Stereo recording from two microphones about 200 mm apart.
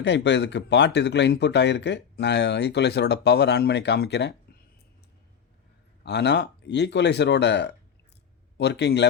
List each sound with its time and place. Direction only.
0.0 s speech: 60° left (ahead or behind)
6.0 s speech: 55° left (ahead or behind)